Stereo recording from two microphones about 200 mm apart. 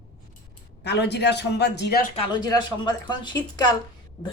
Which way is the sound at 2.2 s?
20° left (ahead or behind).